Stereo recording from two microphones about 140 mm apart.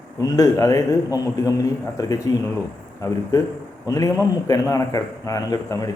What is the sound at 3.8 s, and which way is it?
A man's voice, 25° left (ahead or behind).